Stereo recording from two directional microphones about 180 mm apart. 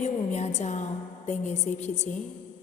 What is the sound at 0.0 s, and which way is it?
A woman's voice, 40° left (ahead or behind).